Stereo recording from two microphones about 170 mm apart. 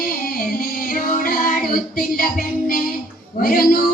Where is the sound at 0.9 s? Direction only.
55° left (ahead or behind).